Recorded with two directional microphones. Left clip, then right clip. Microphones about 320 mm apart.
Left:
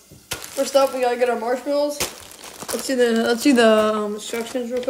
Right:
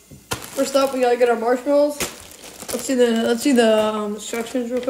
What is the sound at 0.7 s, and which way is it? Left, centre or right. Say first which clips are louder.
Speech: right 1 dB; centre.